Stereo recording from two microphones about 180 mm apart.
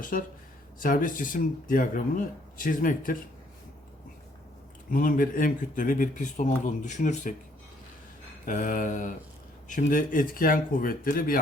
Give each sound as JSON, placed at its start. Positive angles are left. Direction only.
{"t": 0.0, "sound": "speech", "side_deg": 50}
{"t": 4.9, "sound": "speech", "side_deg": 50}
{"t": 8.4, "sound": "speech", "side_deg": 45}